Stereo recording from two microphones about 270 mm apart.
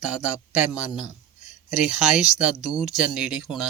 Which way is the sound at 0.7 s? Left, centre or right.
Centre.